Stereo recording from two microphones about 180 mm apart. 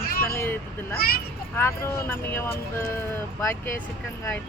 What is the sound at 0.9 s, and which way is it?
Speech, 60° left (ahead or behind).